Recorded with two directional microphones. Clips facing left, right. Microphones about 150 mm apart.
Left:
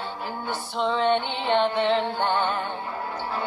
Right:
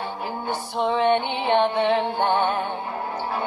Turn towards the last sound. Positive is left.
turn(degrees=-25)  # may be behind; listen again after turning